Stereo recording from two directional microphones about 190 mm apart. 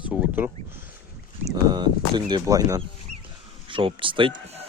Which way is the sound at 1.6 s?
25° right (ahead or behind).